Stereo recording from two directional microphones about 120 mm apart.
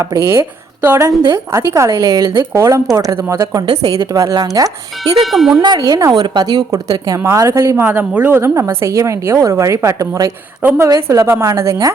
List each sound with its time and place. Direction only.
0.1 s a woman's voice: 25° right (ahead or behind)
5.1 s speech: centre (ahead or behind)
5.6 s speech: 35° right (ahead or behind)
7.3 s a woman's voice: 25° right (ahead or behind)